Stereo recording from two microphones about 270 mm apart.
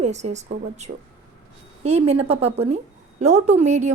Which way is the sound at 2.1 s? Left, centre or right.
Right.